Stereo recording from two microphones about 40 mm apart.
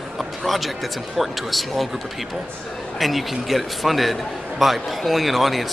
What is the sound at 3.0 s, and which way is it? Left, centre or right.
A man's voice, centre.